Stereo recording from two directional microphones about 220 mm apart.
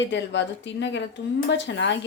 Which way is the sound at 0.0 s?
55° left (ahead or behind).